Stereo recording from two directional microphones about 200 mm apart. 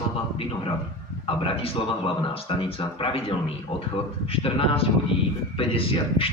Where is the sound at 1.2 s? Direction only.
25° left (ahead or behind).